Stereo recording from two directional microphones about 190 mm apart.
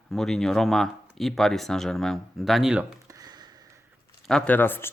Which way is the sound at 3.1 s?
20° right (ahead or behind).